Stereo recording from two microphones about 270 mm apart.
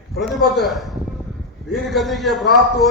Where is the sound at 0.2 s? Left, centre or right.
Centre.